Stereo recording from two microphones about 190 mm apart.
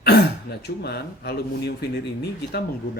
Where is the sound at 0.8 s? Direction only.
60° left (ahead or behind).